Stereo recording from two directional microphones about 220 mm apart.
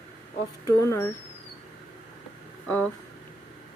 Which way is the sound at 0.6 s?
15° left (ahead or behind).